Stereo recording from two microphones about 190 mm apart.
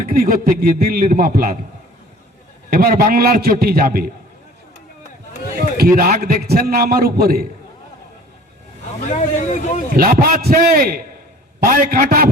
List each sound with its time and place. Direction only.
0.0 s a man's voice: 50° right (ahead or behind)
2.7 s a man's voice: 50° right (ahead or behind)
5.5 s a man's voice: 50° right (ahead or behind)
9.0 s speech: 40° left (ahead or behind)
9.9 s a man's voice: 50° right (ahead or behind)